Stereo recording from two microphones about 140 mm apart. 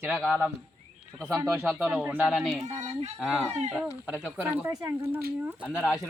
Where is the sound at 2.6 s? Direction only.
55° right (ahead or behind).